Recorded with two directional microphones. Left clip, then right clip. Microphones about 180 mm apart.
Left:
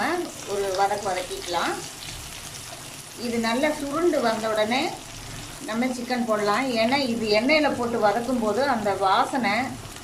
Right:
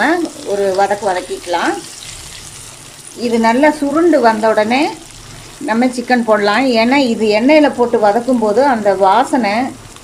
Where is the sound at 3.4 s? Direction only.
45° right (ahead or behind).